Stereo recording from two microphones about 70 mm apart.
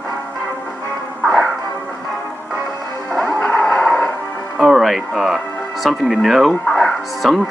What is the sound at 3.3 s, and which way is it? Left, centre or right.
Music, centre.